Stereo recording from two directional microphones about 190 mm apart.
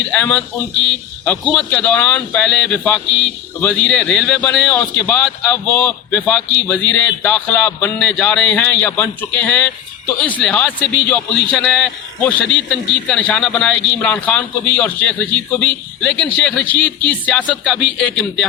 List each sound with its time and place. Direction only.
0.1 s a man's voice: 5° left (ahead or behind)